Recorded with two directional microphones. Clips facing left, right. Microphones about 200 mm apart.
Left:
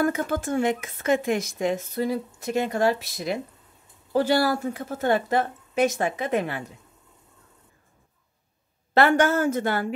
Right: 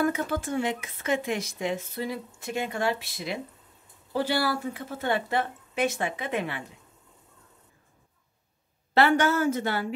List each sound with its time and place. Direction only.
0.0 s a woman's voice: 45° left (ahead or behind)
8.9 s a woman's voice: 50° left (ahead or behind)